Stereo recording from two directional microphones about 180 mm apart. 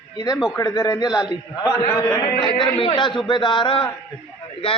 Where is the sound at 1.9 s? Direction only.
15° left (ahead or behind).